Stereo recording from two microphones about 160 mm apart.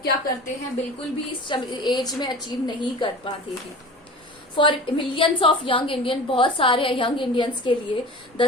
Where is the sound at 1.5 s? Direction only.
25° left (ahead or behind).